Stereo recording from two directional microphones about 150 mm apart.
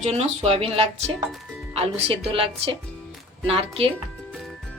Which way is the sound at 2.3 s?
35° right (ahead or behind).